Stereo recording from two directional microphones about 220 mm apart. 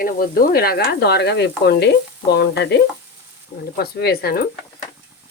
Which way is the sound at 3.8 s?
45° left (ahead or behind).